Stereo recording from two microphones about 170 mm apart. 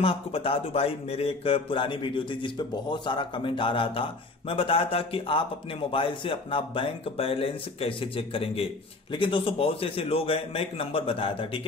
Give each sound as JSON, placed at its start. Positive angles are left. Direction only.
{"t": 0.0, "sound": "speech", "side_deg": 35}